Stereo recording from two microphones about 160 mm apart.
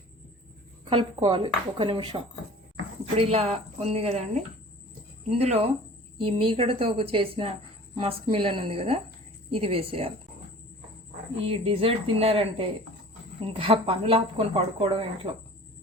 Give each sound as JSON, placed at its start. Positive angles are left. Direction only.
{"t": 0.9, "sound": "speech", "side_deg": -35}
{"t": 11.3, "sound": "speech", "side_deg": -35}